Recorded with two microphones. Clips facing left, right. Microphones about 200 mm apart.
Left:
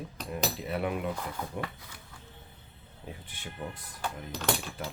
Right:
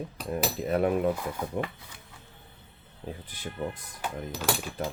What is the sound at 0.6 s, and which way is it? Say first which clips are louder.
Cutlery: right 10 dB; 45° right (ahead or behind).